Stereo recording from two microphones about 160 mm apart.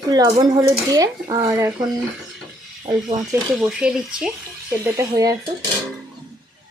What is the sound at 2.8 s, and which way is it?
Speech, 30° right (ahead or behind).